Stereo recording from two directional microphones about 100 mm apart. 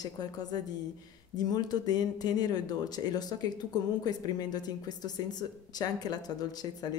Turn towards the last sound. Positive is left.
turn(degrees=40)  # may be behind; listen again after turning